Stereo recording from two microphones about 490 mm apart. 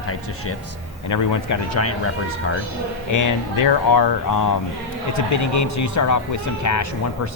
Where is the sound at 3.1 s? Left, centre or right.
Left.